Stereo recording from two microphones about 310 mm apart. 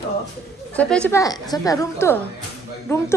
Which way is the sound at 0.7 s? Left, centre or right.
Centre.